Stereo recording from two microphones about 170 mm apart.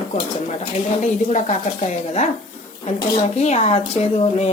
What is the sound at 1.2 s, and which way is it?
Speech, 45° left (ahead or behind).